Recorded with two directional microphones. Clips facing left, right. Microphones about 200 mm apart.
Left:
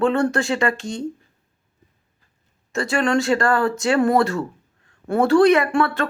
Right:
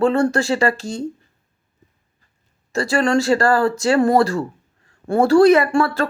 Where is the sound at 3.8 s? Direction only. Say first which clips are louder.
Right 2 dB; 30° right (ahead or behind).